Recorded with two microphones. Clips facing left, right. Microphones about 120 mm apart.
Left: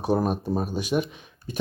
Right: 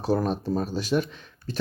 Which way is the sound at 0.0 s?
20° left (ahead or behind).